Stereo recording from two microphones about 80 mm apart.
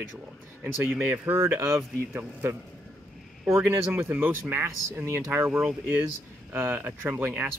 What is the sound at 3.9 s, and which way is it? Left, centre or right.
Speech, right.